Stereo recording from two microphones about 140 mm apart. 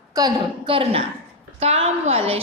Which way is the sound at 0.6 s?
40° right (ahead or behind).